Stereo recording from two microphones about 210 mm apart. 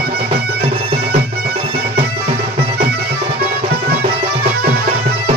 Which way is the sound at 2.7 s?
45° right (ahead or behind).